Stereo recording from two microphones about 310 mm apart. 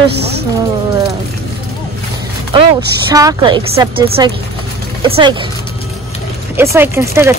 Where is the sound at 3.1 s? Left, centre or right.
Centre.